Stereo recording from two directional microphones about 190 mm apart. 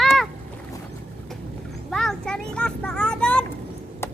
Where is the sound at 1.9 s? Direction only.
5° left (ahead or behind).